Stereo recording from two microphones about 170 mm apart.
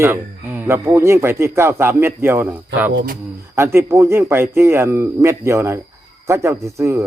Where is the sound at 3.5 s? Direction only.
15° right (ahead or behind).